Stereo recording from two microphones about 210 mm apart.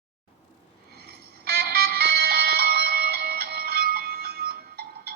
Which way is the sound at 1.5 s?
50° right (ahead or behind).